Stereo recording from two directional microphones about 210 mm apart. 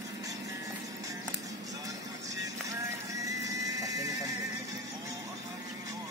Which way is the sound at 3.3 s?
15° right (ahead or behind).